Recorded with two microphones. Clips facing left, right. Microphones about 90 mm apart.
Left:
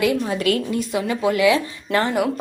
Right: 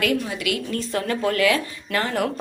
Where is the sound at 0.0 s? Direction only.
20° left (ahead or behind).